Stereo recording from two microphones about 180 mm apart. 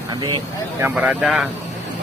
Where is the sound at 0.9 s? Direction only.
5° right (ahead or behind).